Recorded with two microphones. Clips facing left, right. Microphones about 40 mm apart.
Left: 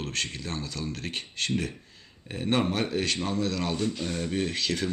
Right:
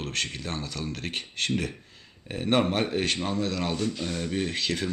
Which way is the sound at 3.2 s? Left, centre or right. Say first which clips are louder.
Even; centre.